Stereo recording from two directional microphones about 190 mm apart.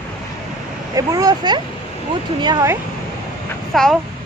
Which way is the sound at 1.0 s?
20° right (ahead or behind).